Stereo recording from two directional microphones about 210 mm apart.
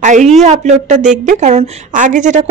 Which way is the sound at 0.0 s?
35° right (ahead or behind).